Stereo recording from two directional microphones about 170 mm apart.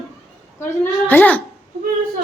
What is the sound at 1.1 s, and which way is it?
Speech, 10° left (ahead or behind).